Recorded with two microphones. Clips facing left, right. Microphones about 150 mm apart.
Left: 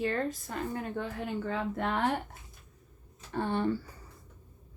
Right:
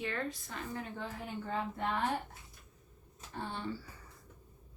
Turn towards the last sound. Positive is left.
turn(degrees=60)  # may be behind; listen again after turning